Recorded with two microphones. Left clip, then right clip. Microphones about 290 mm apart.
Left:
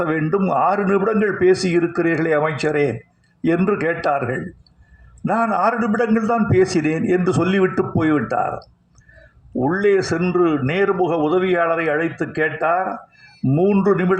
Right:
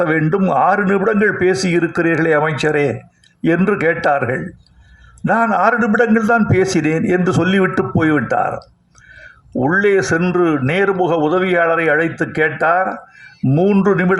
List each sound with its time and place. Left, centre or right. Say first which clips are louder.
0.0 s a man's voice: right 4 dB; right
9.6 s a man's voice: right 3 dB; right